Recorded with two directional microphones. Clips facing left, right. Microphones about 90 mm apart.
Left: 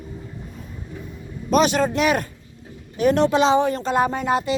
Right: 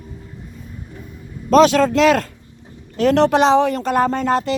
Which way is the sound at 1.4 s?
90° right.